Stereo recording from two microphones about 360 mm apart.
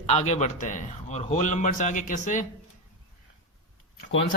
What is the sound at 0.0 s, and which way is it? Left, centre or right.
A man's voice, centre.